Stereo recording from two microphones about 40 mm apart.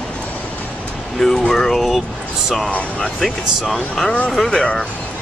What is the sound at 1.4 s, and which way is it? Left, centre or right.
Speech, centre.